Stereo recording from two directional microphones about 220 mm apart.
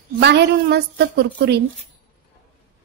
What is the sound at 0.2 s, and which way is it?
A woman's voice, 50° right (ahead or behind).